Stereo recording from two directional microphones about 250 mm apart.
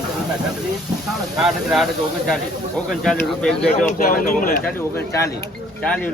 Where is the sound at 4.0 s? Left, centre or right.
Left.